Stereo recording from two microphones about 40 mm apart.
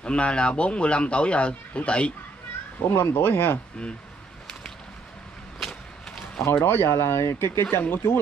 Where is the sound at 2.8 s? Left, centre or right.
Left.